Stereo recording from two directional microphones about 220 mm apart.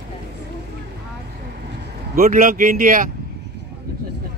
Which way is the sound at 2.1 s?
40° right (ahead or behind).